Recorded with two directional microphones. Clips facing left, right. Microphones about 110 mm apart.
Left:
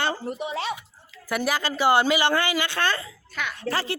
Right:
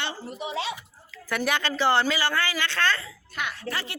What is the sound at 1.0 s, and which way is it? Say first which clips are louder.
Speech: left 1 dB; 15° left (ahead or behind).